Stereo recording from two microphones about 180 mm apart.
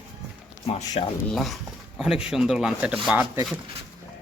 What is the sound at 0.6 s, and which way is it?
Speech, 35° left (ahead or behind).